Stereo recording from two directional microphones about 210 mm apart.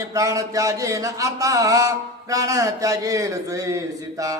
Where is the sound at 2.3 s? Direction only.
15° right (ahead or behind).